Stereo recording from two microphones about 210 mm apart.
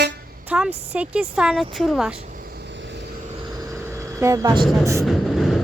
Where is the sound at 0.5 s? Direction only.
5° right (ahead or behind).